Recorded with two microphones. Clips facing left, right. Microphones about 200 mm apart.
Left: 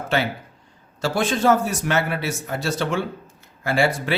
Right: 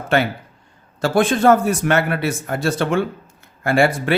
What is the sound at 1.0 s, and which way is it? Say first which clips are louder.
A man's voice: right 5 dB; 55° right (ahead or behind).